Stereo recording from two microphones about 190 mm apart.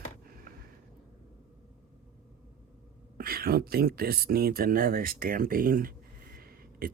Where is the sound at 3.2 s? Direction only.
50° right (ahead or behind).